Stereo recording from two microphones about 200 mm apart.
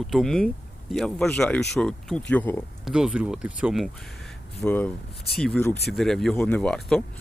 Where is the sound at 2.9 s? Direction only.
5° right (ahead or behind).